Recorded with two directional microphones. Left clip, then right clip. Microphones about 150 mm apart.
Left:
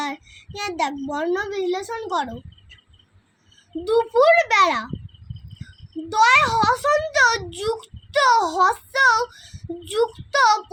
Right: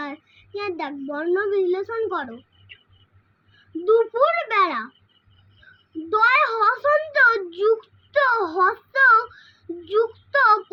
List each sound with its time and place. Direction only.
0.0 s a child's voice: 90° left
3.8 s a child's voice: 90° left
6.1 s a child's voice: 90° left